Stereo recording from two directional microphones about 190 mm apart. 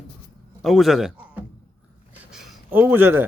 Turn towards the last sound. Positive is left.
turn(degrees=-10)  # may be behind; listen again after turning